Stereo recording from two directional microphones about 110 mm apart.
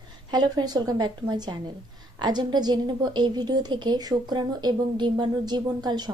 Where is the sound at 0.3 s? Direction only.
40° right (ahead or behind).